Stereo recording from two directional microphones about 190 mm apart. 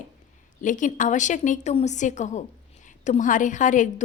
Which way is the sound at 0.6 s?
40° left (ahead or behind).